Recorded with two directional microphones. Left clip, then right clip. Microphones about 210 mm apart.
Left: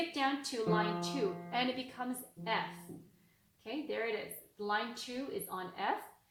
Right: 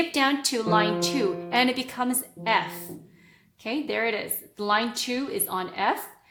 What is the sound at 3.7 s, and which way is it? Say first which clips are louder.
A woman's voice: right 11 dB; 40° right (ahead or behind).